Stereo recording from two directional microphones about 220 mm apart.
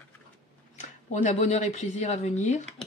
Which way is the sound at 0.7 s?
35° left (ahead or behind).